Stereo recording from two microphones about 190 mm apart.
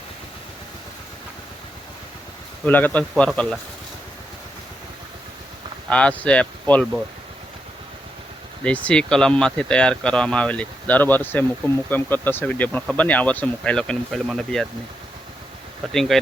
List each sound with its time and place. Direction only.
2.6 s speech: 10° left (ahead or behind)
5.9 s speech: 5° left (ahead or behind)
8.6 s speech: 5° left (ahead or behind)
15.9 s speech: centre (ahead or behind)